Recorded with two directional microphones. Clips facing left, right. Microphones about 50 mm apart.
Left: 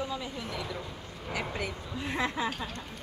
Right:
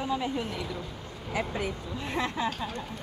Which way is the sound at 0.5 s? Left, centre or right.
Centre.